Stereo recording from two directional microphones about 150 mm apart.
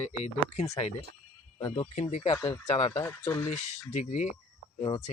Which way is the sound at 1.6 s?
35° left (ahead or behind).